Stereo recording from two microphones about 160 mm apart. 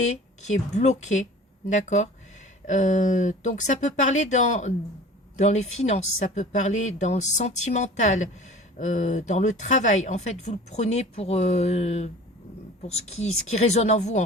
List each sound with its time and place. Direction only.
0.1 s speech: 45° left (ahead or behind)